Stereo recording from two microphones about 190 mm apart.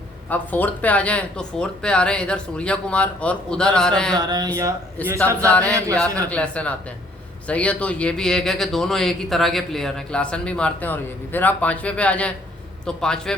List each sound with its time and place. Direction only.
0.3 s a man's voice: 10° left (ahead or behind)
4.2 s speech: 20° right (ahead or behind)
5.0 s a man's voice: 10° left (ahead or behind)